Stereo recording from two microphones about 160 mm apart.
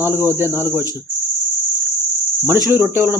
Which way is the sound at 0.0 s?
15° right (ahead or behind).